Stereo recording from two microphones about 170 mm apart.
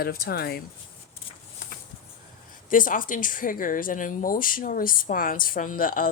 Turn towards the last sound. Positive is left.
turn(degrees=55)  # may be behind; listen again after turning